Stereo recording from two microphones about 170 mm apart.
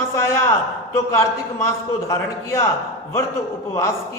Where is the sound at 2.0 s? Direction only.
20° left (ahead or behind).